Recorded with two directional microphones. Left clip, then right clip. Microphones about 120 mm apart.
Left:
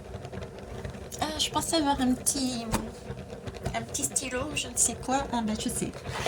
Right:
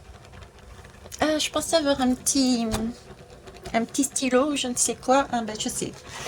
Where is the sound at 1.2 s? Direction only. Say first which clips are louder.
Right 9 dB; 45° right (ahead or behind).